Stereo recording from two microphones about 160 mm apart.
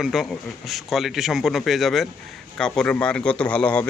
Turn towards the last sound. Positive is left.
turn(degrees=10)  # may be behind; listen again after turning